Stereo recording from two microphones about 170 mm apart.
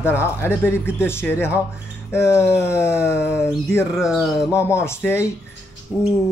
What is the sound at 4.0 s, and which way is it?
Speech, centre (ahead or behind).